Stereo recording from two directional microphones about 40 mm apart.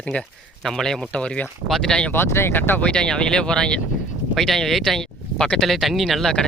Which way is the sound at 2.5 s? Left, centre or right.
Left.